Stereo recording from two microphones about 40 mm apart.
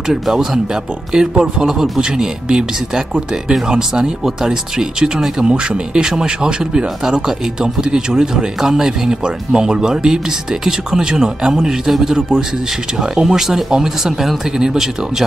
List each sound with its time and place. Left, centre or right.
0.1 s speech: centre